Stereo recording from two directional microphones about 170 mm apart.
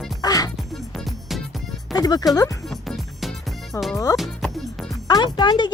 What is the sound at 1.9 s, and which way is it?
Speech, 20° left (ahead or behind).